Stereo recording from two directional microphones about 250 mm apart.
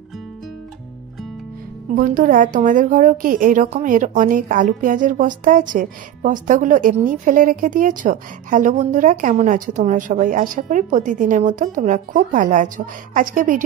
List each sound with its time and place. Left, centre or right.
2.0 s a woman's voice: right